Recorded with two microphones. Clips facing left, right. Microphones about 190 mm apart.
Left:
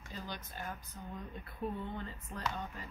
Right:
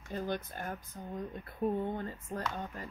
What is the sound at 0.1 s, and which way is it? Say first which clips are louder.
Speech: right 9 dB; 50° right (ahead or behind).